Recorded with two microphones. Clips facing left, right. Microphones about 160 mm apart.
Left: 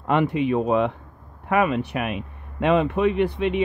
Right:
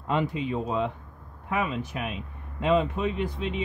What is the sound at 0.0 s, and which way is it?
Speech, 65° left (ahead or behind).